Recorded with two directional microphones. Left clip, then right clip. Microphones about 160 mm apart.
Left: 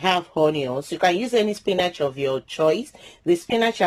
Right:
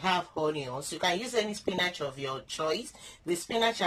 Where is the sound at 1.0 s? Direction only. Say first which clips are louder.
Left 10 dB; 75° left (ahead or behind).